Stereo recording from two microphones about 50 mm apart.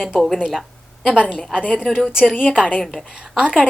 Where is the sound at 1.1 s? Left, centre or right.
Centre.